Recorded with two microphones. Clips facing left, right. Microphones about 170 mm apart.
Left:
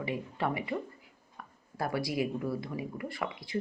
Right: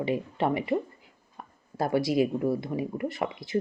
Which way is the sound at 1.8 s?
25° right (ahead or behind).